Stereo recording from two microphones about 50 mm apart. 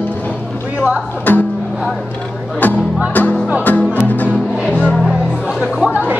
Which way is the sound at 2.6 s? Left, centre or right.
Left.